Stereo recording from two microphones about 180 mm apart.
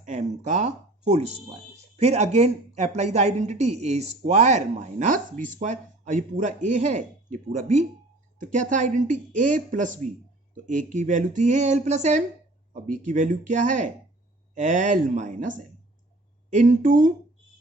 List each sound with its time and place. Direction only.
0.0 s speech: 45° right (ahead or behind)